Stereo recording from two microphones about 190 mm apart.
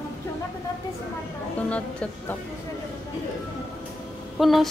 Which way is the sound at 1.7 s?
5° left (ahead or behind).